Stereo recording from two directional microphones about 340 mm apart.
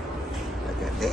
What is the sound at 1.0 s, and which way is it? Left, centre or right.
Vehicle, centre.